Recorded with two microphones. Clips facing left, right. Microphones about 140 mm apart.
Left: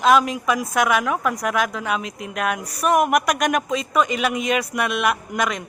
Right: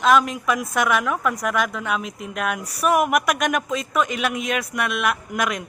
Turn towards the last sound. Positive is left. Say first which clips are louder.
# left 1 dB
turn(degrees=-5)  # may be behind; listen again after turning